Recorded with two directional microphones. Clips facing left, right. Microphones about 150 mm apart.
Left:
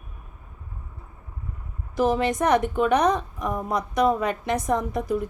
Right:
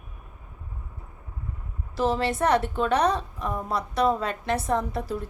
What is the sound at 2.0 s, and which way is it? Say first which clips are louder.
A woman's voice: left 2 dB; 15° left (ahead or behind).